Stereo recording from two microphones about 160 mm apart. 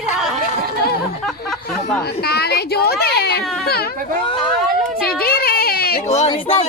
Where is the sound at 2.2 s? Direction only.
80° left.